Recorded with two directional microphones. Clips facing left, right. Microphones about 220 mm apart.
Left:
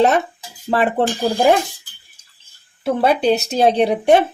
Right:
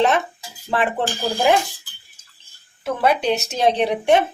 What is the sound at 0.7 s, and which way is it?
Speech, 40° left (ahead or behind).